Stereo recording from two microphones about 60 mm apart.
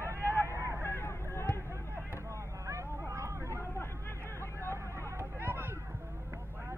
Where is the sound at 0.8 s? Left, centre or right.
Left.